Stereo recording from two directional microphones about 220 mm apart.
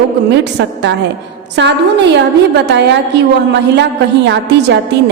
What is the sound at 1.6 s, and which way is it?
Speech, 55° right (ahead or behind).